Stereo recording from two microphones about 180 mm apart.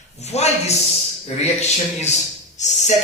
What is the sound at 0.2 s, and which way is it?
Speech, 40° left (ahead or behind).